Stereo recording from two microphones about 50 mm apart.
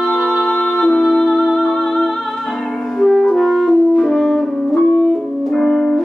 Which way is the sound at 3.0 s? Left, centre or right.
Centre.